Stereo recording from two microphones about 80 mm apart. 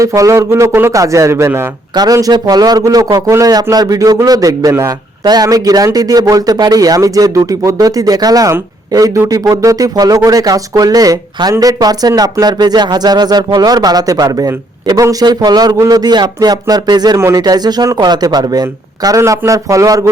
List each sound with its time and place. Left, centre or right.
0.0 s speech: right
2.3 s a man's voice: right
19.2 s a man's voice: right